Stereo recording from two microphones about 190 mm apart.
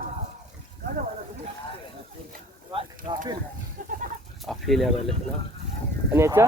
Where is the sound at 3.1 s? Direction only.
25° right (ahead or behind).